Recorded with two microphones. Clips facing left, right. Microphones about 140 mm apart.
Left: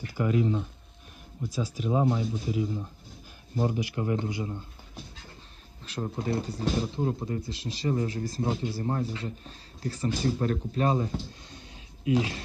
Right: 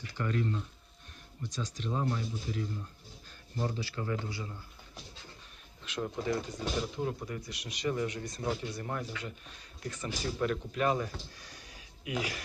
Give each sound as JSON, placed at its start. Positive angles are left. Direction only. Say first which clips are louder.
{"t": 0.1, "sound": "speech", "louder": "left 7 dB", "side_deg": 10}
{"t": 3.7, "sound": "speech", "louder": "left 6 dB", "side_deg": 15}
{"t": 5.8, "sound": "speech", "louder": "left 2 dB", "side_deg": 35}